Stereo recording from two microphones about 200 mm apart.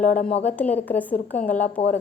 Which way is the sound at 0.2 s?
30° left (ahead or behind).